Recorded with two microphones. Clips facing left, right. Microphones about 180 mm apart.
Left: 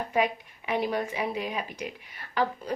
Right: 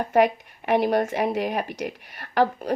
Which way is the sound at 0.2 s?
65° right (ahead or behind).